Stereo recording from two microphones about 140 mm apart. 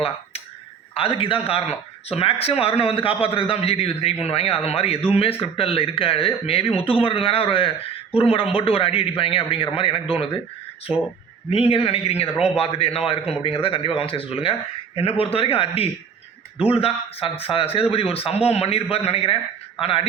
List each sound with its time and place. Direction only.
0.9 s speech: 40° left (ahead or behind)
10.9 s speech: 5° right (ahead or behind)
11.5 s speech: 45° left (ahead or behind)